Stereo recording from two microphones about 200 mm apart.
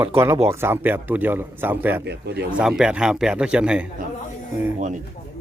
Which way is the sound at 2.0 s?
55° right (ahead or behind).